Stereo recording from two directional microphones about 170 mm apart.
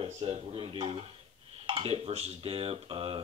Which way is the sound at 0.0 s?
35° right (ahead or behind).